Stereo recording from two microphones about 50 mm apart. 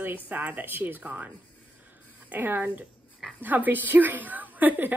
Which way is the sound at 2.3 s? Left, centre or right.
Right.